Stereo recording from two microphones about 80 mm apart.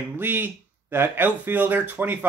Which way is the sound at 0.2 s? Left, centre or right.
Right.